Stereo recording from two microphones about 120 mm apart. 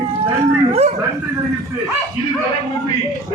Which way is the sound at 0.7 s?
65° right (ahead or behind).